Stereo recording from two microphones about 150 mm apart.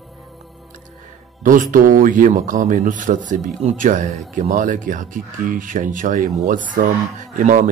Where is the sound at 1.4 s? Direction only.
65° right (ahead or behind).